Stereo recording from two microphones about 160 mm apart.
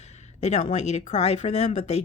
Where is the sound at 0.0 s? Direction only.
45° left (ahead or behind).